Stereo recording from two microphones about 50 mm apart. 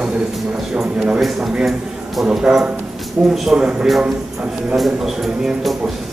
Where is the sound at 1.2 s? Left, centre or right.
Centre.